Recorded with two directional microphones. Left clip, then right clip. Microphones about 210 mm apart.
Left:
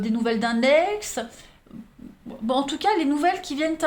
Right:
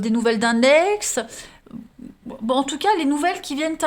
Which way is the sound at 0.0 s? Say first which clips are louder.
Right 5 dB; 50° right (ahead or behind).